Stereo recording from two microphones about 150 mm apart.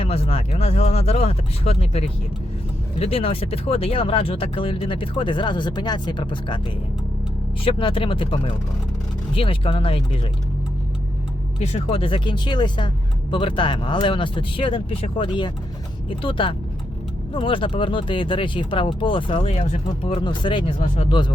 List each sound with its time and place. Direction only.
0.0 s speech: 40° left (ahead or behind)
7.6 s speech: 35° left (ahead or behind)
11.6 s speech: 45° left (ahead or behind)